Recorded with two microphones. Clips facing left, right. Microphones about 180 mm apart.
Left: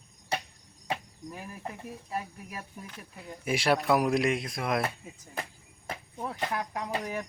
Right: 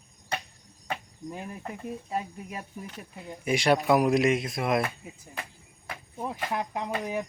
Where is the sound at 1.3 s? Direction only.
25° right (ahead or behind).